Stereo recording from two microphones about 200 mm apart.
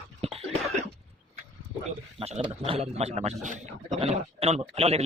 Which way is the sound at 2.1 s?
30° right (ahead or behind).